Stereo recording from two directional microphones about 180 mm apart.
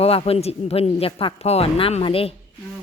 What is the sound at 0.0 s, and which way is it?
A woman's voice, 35° left (ahead or behind).